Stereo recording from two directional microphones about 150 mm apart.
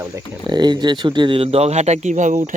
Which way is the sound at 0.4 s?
30° right (ahead or behind).